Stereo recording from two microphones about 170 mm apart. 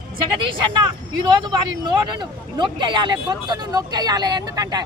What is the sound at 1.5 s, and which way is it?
Speech, 25° right (ahead or behind).